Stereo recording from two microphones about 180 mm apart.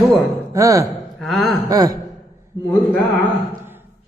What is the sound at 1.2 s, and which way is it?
Speech, centre (ahead or behind).